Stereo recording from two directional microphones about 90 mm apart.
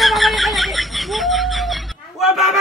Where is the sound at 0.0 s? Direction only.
Centre (ahead or behind).